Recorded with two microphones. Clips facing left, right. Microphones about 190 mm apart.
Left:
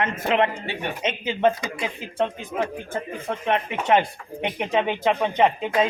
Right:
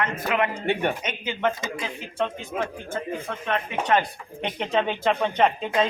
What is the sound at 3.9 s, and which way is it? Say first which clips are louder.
A man's voice: left 4 dB; 20° left (ahead or behind).